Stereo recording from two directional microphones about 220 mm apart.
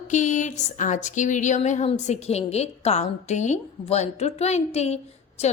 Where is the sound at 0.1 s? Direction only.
35° left (ahead or behind).